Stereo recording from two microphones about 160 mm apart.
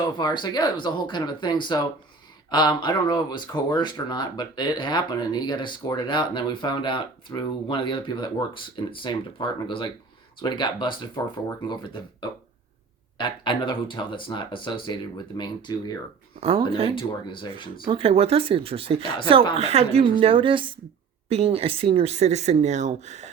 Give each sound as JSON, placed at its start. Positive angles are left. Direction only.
{"t": 0.2, "sound": "speech", "side_deg": 25}
{"t": 16.4, "sound": "speech", "side_deg": -35}
{"t": 16.9, "sound": "speech", "side_deg": 30}
{"t": 17.8, "sound": "speech", "side_deg": -35}